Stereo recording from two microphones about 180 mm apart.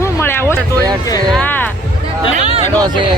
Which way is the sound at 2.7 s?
25° right (ahead or behind).